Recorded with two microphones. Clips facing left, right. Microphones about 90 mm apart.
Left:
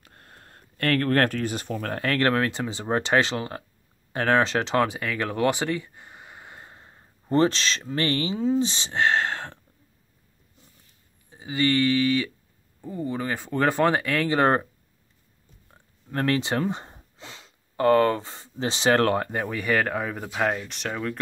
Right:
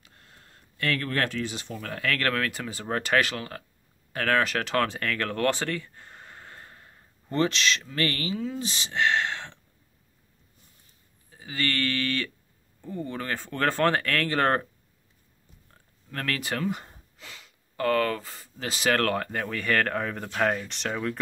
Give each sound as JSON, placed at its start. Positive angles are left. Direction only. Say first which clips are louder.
{"t": 0.0, "sound": "speech", "louder": "left 4 dB", "side_deg": 50}
{"t": 7.3, "sound": "speech", "louder": "left 4 dB", "side_deg": 35}
{"t": 11.2, "sound": "speech", "louder": "left 6 dB", "side_deg": 20}
{"t": 15.7, "sound": "speech", "louder": "left 6 dB", "side_deg": 25}